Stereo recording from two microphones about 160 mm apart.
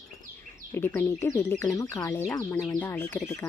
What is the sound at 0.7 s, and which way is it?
Speech, 15° left (ahead or behind).